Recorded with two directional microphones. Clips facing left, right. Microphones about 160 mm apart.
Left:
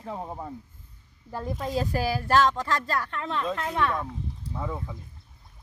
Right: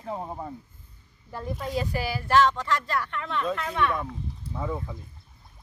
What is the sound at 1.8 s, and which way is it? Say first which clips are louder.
Speech: left 3 dB; 40° left (ahead or behind).